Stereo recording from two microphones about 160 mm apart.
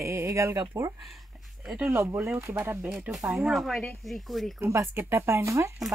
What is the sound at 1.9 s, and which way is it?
Speech, 15° right (ahead or behind).